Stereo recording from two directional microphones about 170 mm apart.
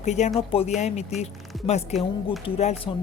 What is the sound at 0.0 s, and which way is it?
A woman's voice, 45° left (ahead or behind).